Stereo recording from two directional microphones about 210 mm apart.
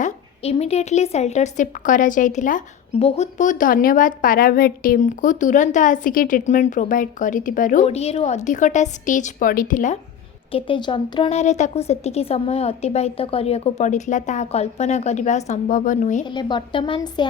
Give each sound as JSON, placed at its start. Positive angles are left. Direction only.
{"t": 0.0, "sound": "a woman's voice", "side_deg": 30}
{"t": 10.5, "sound": "a woman's voice", "side_deg": 20}
{"t": 16.2, "sound": "a woman's voice", "side_deg": 20}